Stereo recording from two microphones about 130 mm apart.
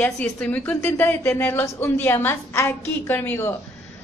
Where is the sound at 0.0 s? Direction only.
10° left (ahead or behind).